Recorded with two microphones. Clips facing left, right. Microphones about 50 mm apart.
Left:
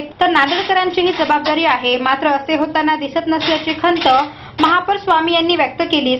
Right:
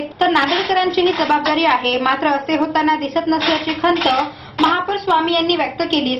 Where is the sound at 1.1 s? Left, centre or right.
Centre.